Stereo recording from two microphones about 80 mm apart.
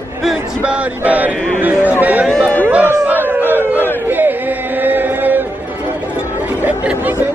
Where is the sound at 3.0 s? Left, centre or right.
Right.